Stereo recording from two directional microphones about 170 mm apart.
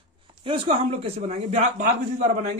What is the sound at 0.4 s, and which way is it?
Speech, 30° right (ahead or behind).